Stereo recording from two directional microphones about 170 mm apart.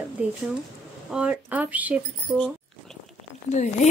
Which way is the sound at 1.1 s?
5° right (ahead or behind).